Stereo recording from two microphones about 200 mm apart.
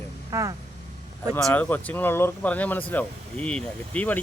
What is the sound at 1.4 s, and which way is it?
Speech, 10° left (ahead or behind).